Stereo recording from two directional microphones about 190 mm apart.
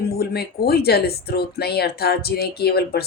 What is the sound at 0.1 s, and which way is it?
Speech, 55° left (ahead or behind).